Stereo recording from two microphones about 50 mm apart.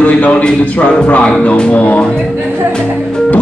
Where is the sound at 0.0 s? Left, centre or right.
Left.